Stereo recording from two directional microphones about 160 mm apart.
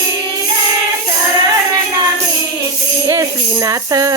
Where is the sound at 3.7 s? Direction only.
20° right (ahead or behind).